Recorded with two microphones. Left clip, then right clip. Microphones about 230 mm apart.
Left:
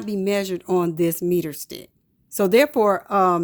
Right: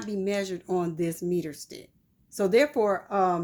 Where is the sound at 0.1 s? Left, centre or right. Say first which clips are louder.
Left 6 dB; left.